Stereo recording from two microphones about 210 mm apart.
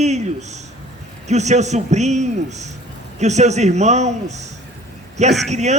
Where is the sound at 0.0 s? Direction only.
35° right (ahead or behind).